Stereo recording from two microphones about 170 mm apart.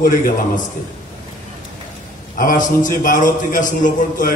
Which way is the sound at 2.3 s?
50° left (ahead or behind).